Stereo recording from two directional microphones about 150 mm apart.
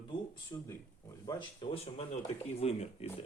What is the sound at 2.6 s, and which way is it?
Speech, 45° left (ahead or behind).